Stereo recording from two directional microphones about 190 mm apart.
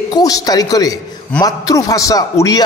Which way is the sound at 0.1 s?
20° left (ahead or behind).